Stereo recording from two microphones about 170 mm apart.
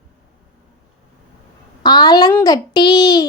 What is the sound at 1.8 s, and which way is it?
A child's voice, 25° left (ahead or behind).